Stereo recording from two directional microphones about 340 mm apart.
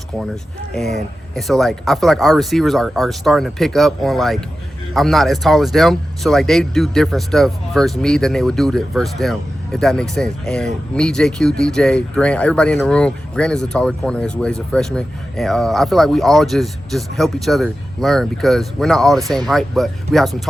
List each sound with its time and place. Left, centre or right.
0.7 s speech: centre